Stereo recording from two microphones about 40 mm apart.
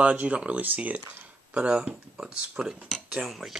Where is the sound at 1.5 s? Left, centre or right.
Right.